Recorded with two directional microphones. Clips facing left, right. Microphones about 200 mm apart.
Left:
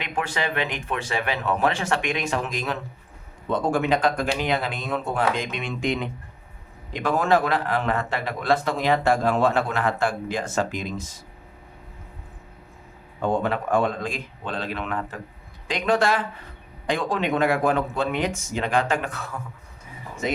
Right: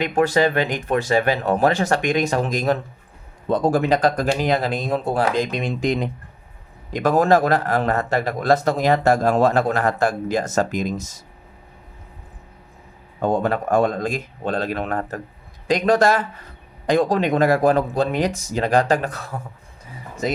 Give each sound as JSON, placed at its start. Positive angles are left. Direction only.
{"t": 0.0, "sound": "a man's voice", "side_deg": -40}
{"t": 13.2, "sound": "a man's voice", "side_deg": -40}